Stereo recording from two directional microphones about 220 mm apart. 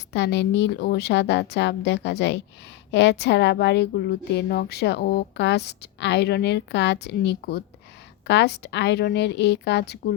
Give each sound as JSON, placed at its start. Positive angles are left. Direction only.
{"t": 0.1, "sound": "a woman's voice", "side_deg": 50}